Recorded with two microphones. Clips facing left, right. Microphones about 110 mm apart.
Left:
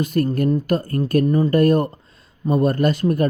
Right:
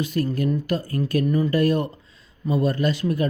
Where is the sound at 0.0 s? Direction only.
50° left (ahead or behind).